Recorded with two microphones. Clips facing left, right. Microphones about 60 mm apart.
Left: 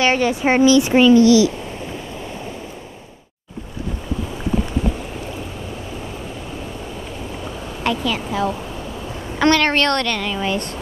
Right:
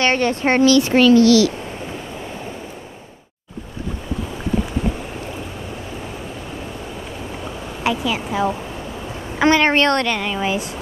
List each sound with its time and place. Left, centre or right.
0.0 s speech: centre
7.8 s a child's voice: centre